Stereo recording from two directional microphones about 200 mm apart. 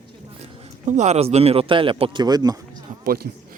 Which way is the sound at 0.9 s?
35° right (ahead or behind).